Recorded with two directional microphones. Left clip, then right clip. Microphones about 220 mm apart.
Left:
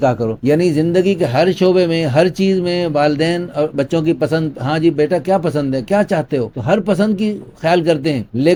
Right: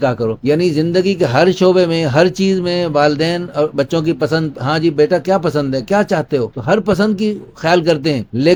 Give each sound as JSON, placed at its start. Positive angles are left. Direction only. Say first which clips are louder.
{"t": 0.0, "sound": "speech", "louder": "even", "side_deg": -10}
{"t": 1.2, "sound": "speech", "louder": "right 2 dB", "side_deg": -25}